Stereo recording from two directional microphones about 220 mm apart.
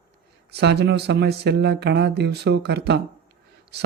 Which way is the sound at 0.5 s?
50° right (ahead or behind).